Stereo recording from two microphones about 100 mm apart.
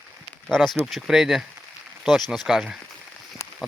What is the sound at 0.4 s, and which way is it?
Speech, 5° left (ahead or behind).